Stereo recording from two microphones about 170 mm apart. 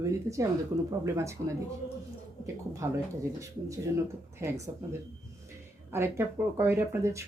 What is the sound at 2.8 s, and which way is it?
Speech, 15° right (ahead or behind).